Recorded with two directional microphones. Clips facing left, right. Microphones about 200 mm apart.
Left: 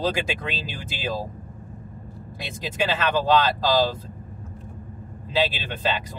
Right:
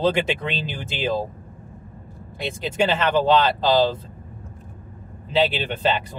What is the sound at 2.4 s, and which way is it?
Speech, 30° right (ahead or behind).